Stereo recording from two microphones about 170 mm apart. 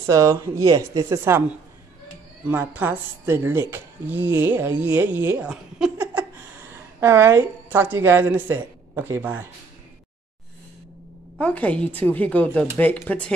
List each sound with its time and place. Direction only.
0.0 s speech: 15° right (ahead or behind)
2.4 s a woman's voice: 10° right (ahead or behind)
11.3 s a woman's voice: 10° left (ahead or behind)